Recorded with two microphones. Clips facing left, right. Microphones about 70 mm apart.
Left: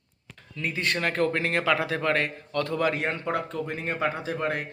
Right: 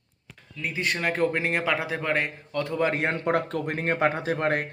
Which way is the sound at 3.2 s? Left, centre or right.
Right.